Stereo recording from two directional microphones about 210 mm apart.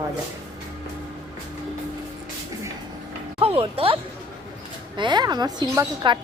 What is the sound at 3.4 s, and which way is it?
A woman's voice, 25° right (ahead or behind).